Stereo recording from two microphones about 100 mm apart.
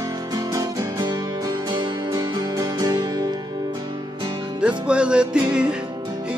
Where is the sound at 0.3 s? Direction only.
35° right (ahead or behind).